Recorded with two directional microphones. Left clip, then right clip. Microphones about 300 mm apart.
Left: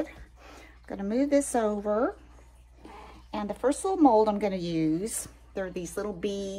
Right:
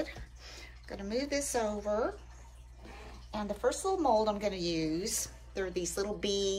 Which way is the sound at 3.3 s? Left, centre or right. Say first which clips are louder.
Left 4 dB; left.